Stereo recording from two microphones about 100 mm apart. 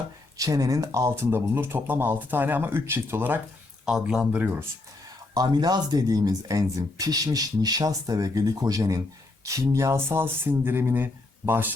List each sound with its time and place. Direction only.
0.3 s speech: 35° right (ahead or behind); by 3.4 s 20° right (ahead or behind)
3.8 s speech: 5° right (ahead or behind)
5.3 s speech: 45° right (ahead or behind); by 11.7 s 20° right (ahead or behind)